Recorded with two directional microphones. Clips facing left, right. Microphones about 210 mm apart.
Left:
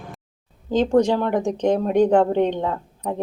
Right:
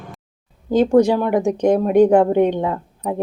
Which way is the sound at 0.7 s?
10° right (ahead or behind).